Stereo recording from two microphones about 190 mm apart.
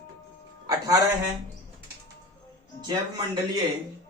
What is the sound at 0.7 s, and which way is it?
Speech, 20° right (ahead or behind).